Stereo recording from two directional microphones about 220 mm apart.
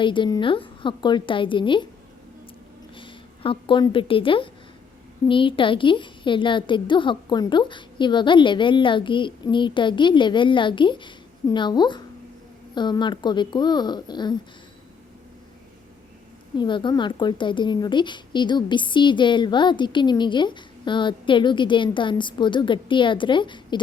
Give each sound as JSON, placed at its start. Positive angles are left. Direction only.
{"t": 0.0, "sound": "a woman's voice", "side_deg": 20}
{"t": 2.9, "sound": "a woman's voice", "side_deg": 25}
{"t": 16.6, "sound": "a woman's voice", "side_deg": 20}